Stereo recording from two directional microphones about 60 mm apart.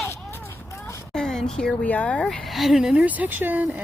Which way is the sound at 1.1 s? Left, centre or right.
Centre.